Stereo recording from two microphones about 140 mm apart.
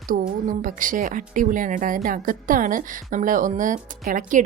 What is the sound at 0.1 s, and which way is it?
A woman's voice, 75° right (ahead or behind).